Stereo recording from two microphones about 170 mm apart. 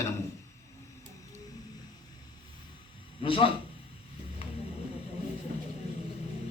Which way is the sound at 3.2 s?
30° left (ahead or behind).